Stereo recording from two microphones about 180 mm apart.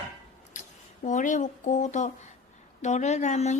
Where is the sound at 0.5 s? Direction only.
45° left (ahead or behind).